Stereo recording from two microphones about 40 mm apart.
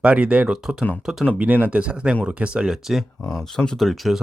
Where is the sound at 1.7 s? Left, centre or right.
Right.